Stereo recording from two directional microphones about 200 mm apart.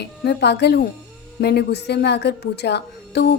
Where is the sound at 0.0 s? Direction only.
55° left (ahead or behind).